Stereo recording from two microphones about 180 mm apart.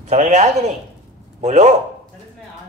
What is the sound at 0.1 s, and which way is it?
Speech, 40° right (ahead or behind).